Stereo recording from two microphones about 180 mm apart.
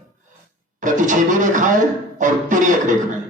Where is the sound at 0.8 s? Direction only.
45° right (ahead or behind).